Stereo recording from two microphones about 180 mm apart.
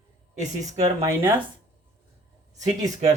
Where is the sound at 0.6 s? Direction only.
40° right (ahead or behind).